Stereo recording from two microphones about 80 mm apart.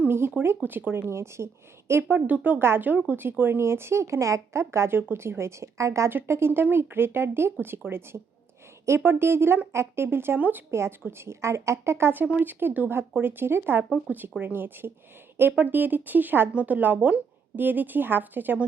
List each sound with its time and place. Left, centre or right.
0.0 s speech: right
10.7 s speech: right